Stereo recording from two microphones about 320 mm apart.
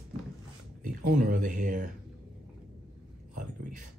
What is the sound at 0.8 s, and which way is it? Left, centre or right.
Speech, right.